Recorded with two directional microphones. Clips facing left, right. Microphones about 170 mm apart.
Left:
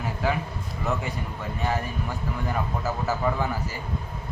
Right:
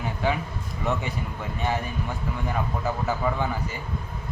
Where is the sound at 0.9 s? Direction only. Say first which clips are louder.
Right 1 dB; centre (ahead or behind).